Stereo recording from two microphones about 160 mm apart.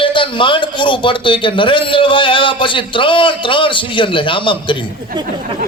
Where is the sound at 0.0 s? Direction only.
30° left (ahead or behind).